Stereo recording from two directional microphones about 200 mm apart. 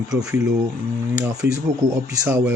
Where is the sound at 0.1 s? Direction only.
5° right (ahead or behind).